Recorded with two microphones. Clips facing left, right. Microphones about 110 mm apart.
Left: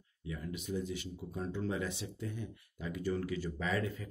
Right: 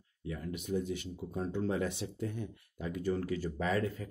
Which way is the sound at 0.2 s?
50° right (ahead or behind).